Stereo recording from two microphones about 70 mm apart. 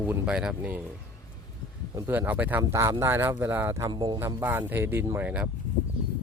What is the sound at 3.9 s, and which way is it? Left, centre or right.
Speech, right.